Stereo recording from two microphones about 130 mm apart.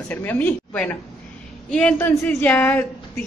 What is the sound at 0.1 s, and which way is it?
Speech, 15° left (ahead or behind).